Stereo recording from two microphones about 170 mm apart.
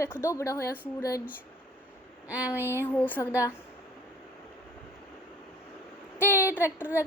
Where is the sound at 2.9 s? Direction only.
10° left (ahead or behind).